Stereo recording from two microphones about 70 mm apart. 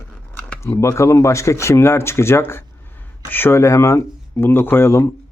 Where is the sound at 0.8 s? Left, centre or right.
Left.